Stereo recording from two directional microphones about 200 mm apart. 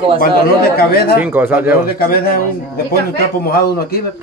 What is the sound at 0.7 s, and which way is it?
Speech, 50° left (ahead or behind).